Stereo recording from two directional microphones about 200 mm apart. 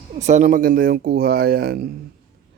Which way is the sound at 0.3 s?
40° right (ahead or behind).